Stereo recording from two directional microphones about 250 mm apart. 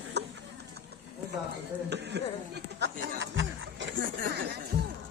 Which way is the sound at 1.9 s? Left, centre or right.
Right.